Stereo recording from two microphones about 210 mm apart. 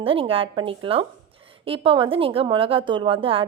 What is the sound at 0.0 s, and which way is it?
A woman's voice, 25° right (ahead or behind).